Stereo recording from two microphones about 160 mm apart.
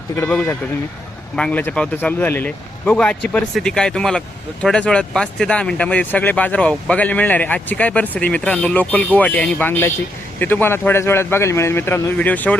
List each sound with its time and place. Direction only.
0.3 s speech: 5° left (ahead or behind)